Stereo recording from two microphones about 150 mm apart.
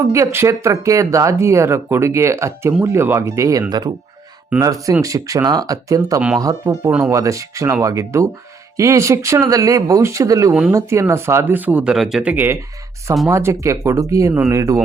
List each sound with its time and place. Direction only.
0.1 s speech: 20° right (ahead or behind)